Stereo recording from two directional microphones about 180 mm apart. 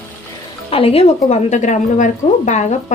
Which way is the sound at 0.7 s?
30° left (ahead or behind).